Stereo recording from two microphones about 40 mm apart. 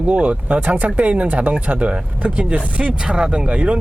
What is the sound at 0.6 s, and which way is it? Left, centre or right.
Speech, right.